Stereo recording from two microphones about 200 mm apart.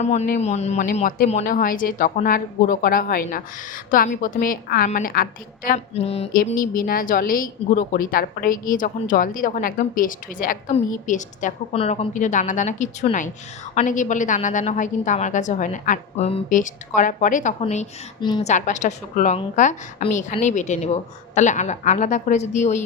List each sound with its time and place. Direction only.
0.0 s a woman's voice: 35° left (ahead or behind)
6.3 s a woman's voice: 45° left (ahead or behind)
18.2 s a woman's voice: 25° left (ahead or behind)
18.4 s a woman's voice: 35° left (ahead or behind)